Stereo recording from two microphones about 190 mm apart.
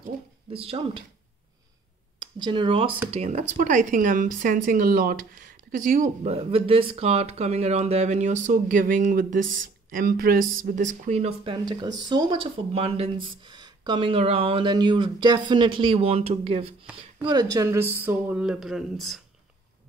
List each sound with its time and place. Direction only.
0.5 s speech: 30° right (ahead or behind)
2.1 s speech: 25° right (ahead or behind); by 19.2 s centre (ahead or behind)